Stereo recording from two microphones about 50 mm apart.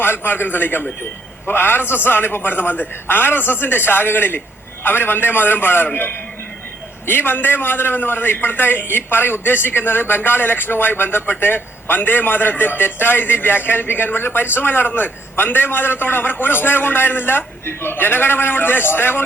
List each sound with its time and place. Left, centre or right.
0.0 s a man's voice: left
7.1 s a man's voice: left